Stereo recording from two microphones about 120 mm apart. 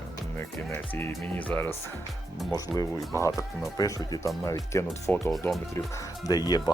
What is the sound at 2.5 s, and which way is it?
Speech, 30° left (ahead or behind).